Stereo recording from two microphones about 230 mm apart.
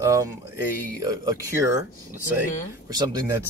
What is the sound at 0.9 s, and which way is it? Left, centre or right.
Speech, centre.